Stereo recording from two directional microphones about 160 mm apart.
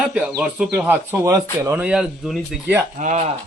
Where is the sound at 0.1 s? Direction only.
5° right (ahead or behind).